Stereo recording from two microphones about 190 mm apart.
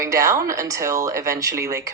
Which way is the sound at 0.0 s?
15° right (ahead or behind).